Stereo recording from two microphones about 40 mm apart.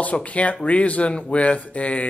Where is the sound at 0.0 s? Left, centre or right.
Left.